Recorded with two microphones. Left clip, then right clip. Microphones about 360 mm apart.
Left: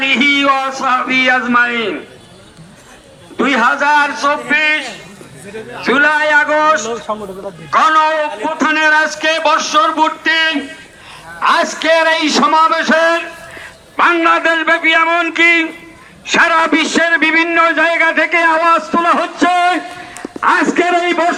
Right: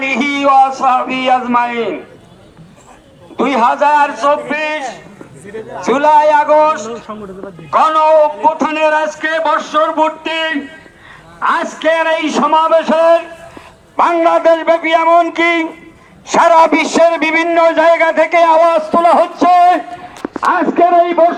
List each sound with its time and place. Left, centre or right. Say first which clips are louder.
0.0 s a man's voice: left 2 dB; centre
3.3 s a man's voice: right 1 dB; centre
7.1 s speech: left 7 dB; centre
7.7 s a man's voice: right 2 dB; centre